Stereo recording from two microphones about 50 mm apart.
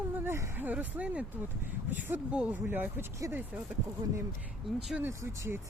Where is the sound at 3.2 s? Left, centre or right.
Right.